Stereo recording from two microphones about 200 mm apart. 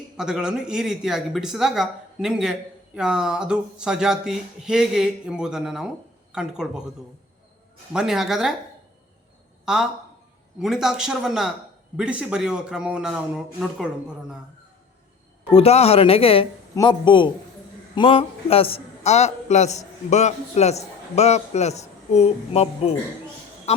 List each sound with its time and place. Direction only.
0.2 s speech: 5° right (ahead or behind)
7.9 s speech: centre (ahead or behind)
9.6 s speech: 5° right (ahead or behind)
15.5 s a man's voice: 30° left (ahead or behind)
23.7 s music: 35° left (ahead or behind)